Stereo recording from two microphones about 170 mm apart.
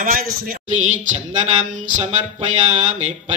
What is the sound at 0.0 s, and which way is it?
Speech, 50° right (ahead or behind).